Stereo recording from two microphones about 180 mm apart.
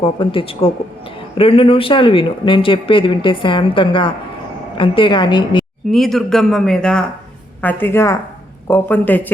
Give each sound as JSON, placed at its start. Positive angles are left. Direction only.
{"t": 0.0, "sound": "speech", "side_deg": 30}
{"t": 5.9, "sound": "a woman's voice", "side_deg": 0}